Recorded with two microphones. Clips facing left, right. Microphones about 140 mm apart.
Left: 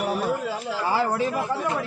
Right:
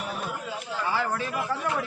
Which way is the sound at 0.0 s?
35° left (ahead or behind).